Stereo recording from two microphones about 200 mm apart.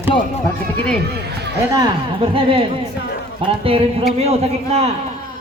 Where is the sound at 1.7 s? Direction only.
20° right (ahead or behind).